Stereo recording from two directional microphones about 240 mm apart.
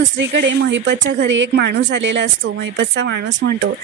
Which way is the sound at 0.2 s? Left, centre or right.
Right.